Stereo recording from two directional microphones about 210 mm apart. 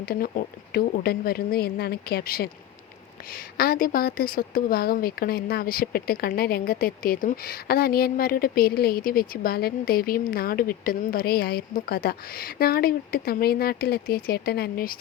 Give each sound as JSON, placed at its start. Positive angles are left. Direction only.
{"t": 0.0, "sound": "speech", "side_deg": 45}